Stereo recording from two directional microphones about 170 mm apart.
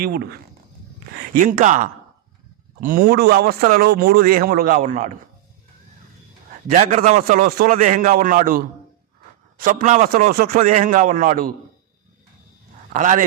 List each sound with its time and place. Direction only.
0.0 s speech: 70° right (ahead or behind)
1.1 s a man's voice: 55° right (ahead or behind)
6.7 s a man's voice: 45° right (ahead or behind)
7.2 s a man's voice: 60° right (ahead or behind)
10.6 s a man's voice: 45° right (ahead or behind)
12.9 s a man's voice: 45° right (ahead or behind)